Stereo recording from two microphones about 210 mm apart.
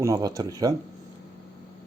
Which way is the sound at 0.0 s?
15° right (ahead or behind).